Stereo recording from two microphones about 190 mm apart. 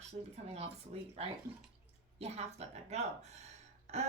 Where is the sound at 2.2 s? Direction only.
35° right (ahead or behind).